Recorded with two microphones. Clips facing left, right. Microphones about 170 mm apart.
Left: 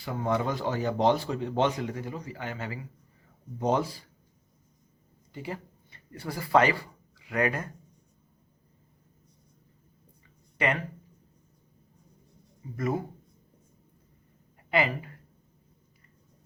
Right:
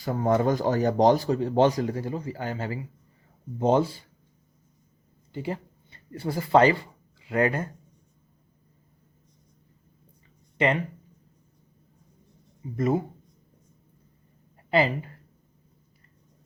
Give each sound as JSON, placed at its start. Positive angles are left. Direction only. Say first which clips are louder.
{"t": 0.0, "sound": "speech", "louder": "right 6 dB", "side_deg": -40}
{"t": 5.3, "sound": "speech", "louder": "right 5 dB", "side_deg": -30}
{"t": 10.6, "sound": "speech", "louder": "right 4 dB", "side_deg": -25}
{"t": 12.7, "sound": "speech", "louder": "right 5 dB", "side_deg": -25}
{"t": 14.7, "sound": "speech", "louder": "right 4 dB", "side_deg": -30}